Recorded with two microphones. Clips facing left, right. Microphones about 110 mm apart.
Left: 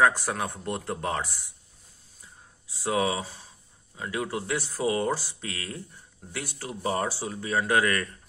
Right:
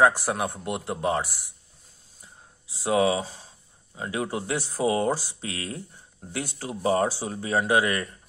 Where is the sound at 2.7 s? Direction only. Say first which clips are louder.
Right 4 dB; 20° right (ahead or behind).